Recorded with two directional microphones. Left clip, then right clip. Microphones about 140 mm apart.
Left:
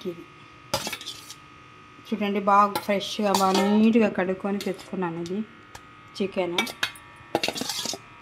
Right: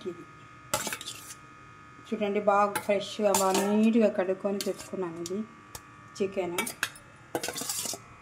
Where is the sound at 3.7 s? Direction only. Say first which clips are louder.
Left 3 dB; 50° left (ahead or behind).